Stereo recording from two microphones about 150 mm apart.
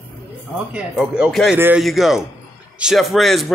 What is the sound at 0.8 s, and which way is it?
A man's voice, 10° right (ahead or behind).